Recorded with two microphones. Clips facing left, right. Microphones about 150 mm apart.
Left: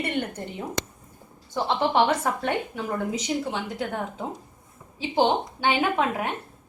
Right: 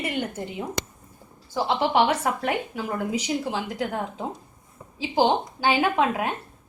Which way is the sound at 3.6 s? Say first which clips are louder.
Right 2 dB; 30° left (ahead or behind).